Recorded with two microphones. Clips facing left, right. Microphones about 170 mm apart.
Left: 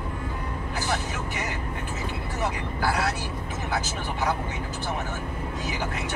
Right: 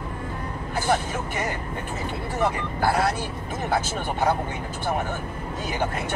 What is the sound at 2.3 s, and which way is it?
Speech, 50° right (ahead or behind).